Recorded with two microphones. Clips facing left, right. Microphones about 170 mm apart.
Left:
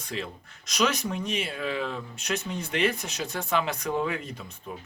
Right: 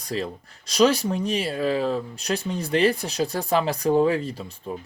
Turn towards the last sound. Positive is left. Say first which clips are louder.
# right 7 dB
turn(degrees=-30)  # may be behind; listen again after turning